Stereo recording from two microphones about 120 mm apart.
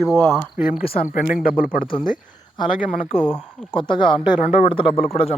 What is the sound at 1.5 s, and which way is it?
Speech, 45° left (ahead or behind).